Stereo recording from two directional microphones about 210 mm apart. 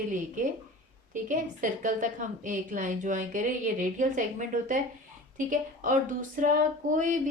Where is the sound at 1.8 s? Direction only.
40° right (ahead or behind).